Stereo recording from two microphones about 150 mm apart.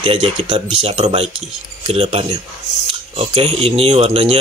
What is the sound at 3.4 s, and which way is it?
Speech, 40° right (ahead or behind).